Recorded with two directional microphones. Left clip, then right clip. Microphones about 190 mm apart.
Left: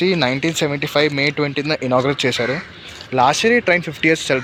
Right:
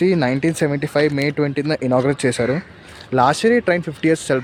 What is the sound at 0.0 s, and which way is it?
A man's voice, 30° right (ahead or behind).